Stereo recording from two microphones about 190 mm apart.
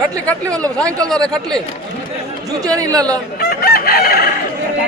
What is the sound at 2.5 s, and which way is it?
Speech, 15° right (ahead or behind).